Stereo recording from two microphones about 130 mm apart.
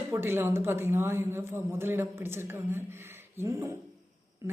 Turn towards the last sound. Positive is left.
turn(degrees=-25)  # may be behind; listen again after turning